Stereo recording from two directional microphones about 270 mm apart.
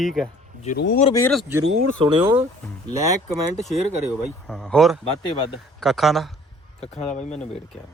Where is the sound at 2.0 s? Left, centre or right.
Centre.